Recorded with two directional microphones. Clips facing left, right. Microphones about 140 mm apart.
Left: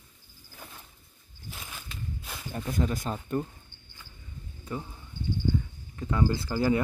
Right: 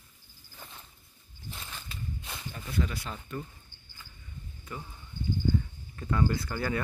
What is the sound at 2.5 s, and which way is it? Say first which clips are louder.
Speech: left 5 dB; 45° left (ahead or behind).